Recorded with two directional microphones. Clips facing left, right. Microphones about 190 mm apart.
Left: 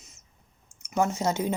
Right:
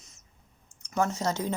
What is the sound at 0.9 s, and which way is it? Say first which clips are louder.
Speech: left 2 dB; 20° left (ahead or behind).